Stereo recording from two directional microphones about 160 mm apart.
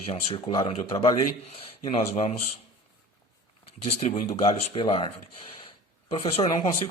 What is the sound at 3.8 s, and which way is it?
Speech, 40° left (ahead or behind).